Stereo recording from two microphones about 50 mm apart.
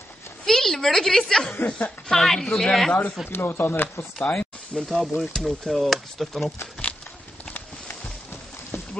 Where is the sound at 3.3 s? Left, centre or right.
Left.